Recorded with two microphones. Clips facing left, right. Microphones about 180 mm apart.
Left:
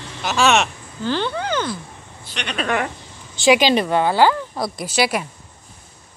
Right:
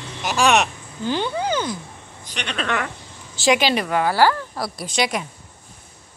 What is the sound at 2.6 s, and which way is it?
Speech, 30° left (ahead or behind).